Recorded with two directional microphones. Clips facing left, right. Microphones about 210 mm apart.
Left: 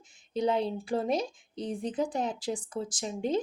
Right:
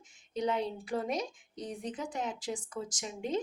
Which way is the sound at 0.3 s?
30° left (ahead or behind).